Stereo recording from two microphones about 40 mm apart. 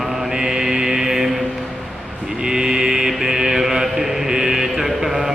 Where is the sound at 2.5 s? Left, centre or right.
Centre.